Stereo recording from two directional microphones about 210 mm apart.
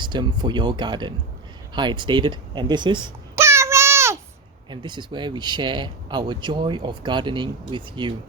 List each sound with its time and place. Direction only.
0.0 s speech: 20° right (ahead or behind)
1.7 s babbling: 20° right (ahead or behind)
4.7 s speech: 20° right (ahead or behind)